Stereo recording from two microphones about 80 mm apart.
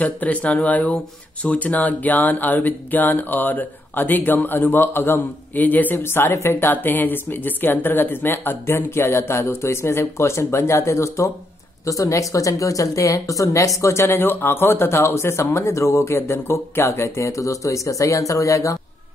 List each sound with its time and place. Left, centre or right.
0.0 s speech: centre; by 18.8 s left